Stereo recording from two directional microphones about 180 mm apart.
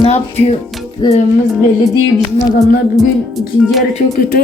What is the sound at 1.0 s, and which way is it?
Music, 20° left (ahead or behind).